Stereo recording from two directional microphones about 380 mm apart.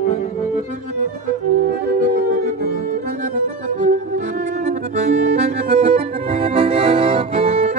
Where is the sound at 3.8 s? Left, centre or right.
Centre.